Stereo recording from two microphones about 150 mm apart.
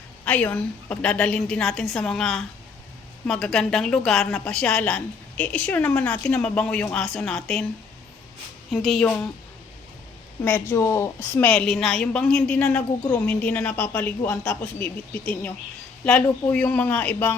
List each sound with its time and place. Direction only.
0.3 s a woman's voice: 10° left (ahead or behind)
8.7 s a woman's voice: centre (ahead or behind)
10.4 s a woman's voice: 15° left (ahead or behind)